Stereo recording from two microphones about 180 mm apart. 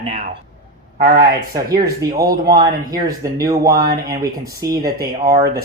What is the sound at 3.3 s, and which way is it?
Speech, 20° right (ahead or behind).